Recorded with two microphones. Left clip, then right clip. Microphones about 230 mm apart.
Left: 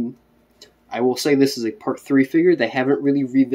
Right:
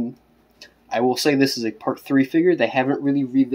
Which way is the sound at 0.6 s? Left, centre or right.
Centre.